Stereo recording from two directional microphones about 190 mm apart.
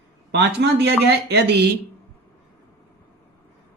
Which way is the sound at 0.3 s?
60° right (ahead or behind).